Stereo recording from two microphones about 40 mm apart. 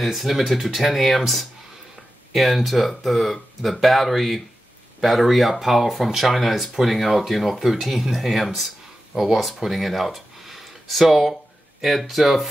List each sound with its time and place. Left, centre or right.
0.0 s speech: centre